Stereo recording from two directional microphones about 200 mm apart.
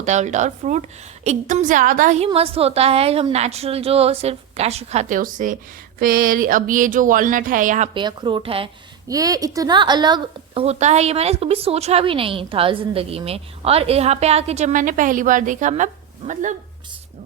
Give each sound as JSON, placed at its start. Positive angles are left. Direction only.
{"t": 0.0, "sound": "a woman's voice", "side_deg": -35}
{"t": 7.9, "sound": "a woman's voice", "side_deg": -25}